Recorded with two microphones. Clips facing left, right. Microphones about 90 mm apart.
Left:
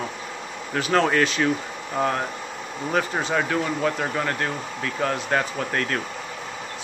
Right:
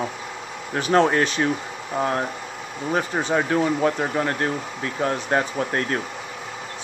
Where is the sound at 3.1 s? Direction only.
15° right (ahead or behind).